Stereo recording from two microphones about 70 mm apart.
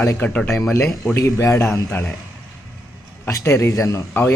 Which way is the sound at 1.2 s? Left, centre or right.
Left.